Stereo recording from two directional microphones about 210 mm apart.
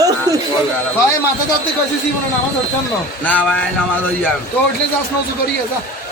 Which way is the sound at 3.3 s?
10° left (ahead or behind).